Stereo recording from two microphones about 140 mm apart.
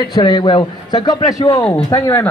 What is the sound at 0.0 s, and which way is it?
A man's voice, 30° left (ahead or behind).